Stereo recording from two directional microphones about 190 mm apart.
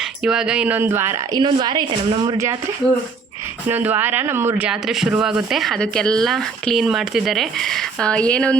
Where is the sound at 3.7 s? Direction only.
10° right (ahead or behind); by 8.5 s 5° left (ahead or behind).